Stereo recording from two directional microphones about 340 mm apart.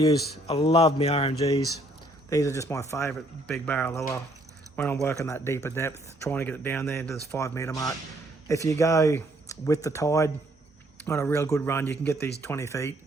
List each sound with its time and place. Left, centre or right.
0.0 s speech: centre
5.0 s speech: centre